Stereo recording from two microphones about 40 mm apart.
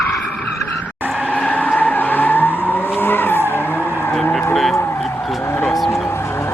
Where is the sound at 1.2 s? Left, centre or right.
Left.